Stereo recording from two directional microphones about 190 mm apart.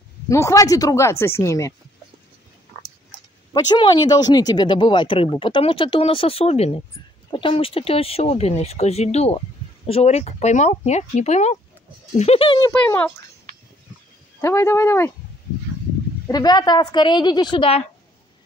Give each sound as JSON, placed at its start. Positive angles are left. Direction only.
{"t": 0.3, "sound": "speech", "side_deg": 15}
{"t": 3.5, "sound": "speech", "side_deg": 25}
{"t": 12.8, "sound": "speech", "side_deg": 10}
{"t": 13.5, "sound": "a sound", "side_deg": -45}
{"t": 14.4, "sound": "speech", "side_deg": 15}
{"t": 16.3, "sound": "speech", "side_deg": 20}